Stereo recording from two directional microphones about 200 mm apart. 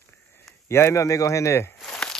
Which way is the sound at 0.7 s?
15° left (ahead or behind).